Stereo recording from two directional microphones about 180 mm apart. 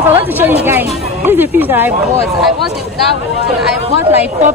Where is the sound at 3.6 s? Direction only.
5° right (ahead or behind).